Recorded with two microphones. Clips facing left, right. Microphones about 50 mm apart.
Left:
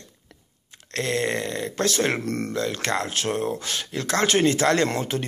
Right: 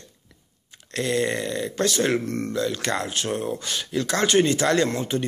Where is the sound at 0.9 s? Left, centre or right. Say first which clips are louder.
Right 1 dB; left.